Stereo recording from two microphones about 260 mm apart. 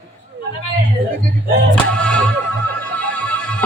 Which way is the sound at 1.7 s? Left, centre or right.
Centre.